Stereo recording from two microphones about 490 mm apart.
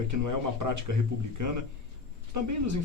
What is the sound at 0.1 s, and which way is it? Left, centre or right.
Speech, right.